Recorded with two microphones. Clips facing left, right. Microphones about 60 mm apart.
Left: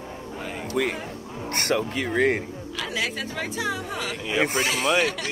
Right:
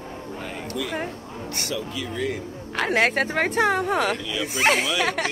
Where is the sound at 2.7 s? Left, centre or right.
Right.